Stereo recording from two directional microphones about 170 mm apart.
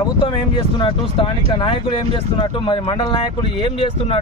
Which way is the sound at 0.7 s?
30° left (ahead or behind).